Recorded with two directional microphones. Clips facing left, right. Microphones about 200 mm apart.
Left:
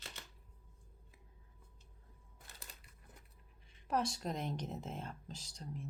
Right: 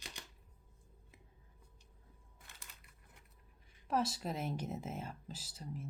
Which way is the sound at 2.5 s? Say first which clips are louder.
Left 4 dB; 35° left (ahead or behind).